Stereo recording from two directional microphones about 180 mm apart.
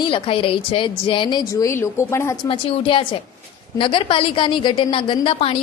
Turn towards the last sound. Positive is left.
turn(degrees=30)  # may be behind; listen again after turning